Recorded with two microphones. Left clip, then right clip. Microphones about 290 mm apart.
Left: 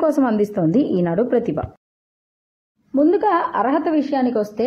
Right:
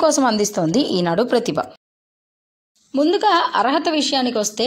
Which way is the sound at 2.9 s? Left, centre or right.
Left.